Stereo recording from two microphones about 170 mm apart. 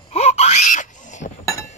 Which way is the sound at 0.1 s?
40° left (ahead or behind).